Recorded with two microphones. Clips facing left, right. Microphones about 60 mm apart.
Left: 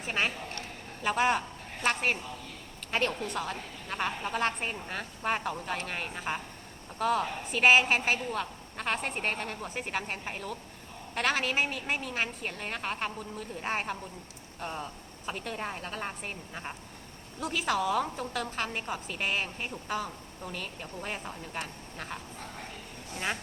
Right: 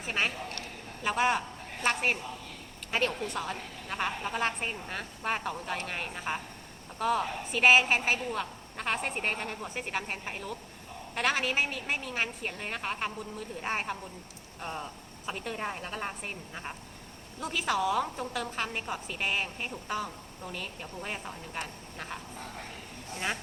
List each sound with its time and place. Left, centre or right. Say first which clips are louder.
0.0 s a woman's voice: even; centre